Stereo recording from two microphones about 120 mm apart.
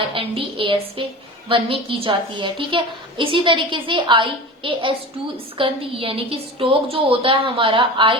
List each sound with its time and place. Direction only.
0.1 s a woman's voice: 50° right (ahead or behind)